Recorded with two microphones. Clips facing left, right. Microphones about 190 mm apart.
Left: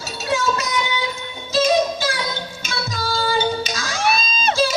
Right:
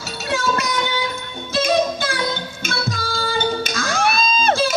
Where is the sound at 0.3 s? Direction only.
55° right (ahead or behind).